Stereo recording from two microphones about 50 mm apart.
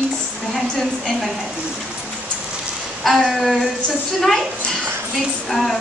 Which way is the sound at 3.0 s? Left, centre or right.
Centre.